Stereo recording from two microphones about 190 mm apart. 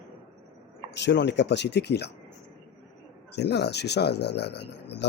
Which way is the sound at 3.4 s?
60° left (ahead or behind).